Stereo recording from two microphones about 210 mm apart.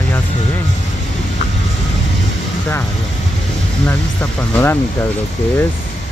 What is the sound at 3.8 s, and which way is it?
Speech, 10° left (ahead or behind).